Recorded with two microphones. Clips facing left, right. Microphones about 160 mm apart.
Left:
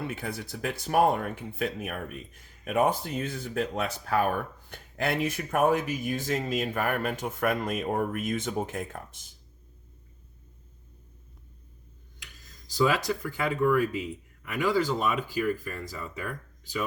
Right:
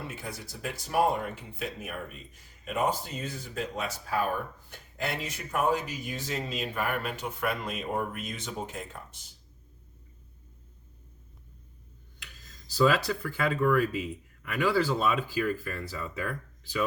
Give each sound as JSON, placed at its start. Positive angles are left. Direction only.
{"t": 0.1, "sound": "speech", "side_deg": 65}
{"t": 12.7, "sound": "speech", "side_deg": 15}